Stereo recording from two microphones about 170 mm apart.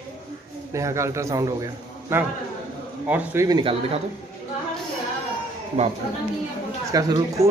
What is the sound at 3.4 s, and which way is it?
Speech, 25° right (ahead or behind).